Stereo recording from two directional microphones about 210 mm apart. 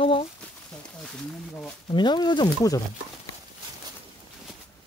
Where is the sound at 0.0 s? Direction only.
25° left (ahead or behind).